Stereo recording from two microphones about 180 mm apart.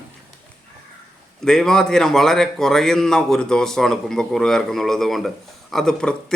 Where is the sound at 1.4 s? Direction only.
5° left (ahead or behind).